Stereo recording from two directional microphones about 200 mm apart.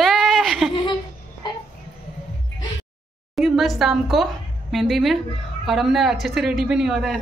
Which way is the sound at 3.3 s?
Centre (ahead or behind).